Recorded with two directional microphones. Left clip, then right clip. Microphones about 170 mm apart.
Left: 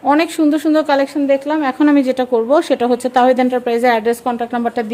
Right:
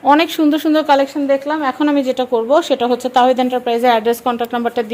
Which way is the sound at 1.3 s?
25° left (ahead or behind).